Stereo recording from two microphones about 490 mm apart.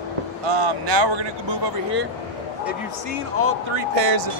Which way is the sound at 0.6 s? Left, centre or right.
Right.